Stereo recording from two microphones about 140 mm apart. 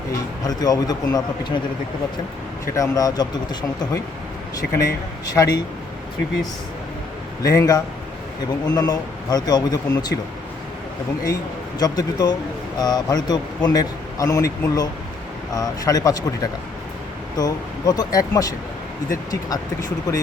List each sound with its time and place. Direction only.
0.4 s a man's voice: 25° left (ahead or behind)
2.7 s a man's voice: 25° left (ahead or behind)
5.3 s a man's voice: 30° left (ahead or behind)
7.4 s a man's voice: 25° left (ahead or behind)
11.8 s a man's voice: 30° left (ahead or behind)